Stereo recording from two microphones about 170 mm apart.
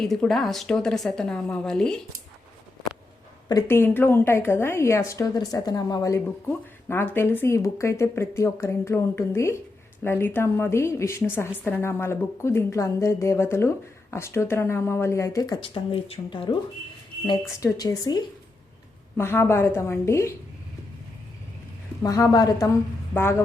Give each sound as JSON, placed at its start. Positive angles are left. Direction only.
{"t": 0.0, "sound": "a woman's voice", "side_deg": 0}
{"t": 3.5, "sound": "a woman's voice", "side_deg": 15}
{"t": 17.2, "sound": "a woman's voice", "side_deg": 20}
{"t": 22.0, "sound": "speech", "side_deg": 20}